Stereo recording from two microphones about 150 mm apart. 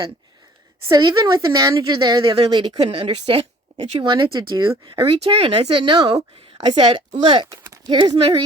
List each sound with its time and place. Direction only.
0.9 s a woman's voice: 25° right (ahead or behind)
4.9 s speech: 40° right (ahead or behind)
7.5 s a sound: 20° right (ahead or behind)
7.9 s speech: 35° right (ahead or behind)